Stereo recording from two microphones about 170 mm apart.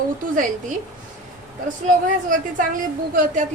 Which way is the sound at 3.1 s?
50° right (ahead or behind).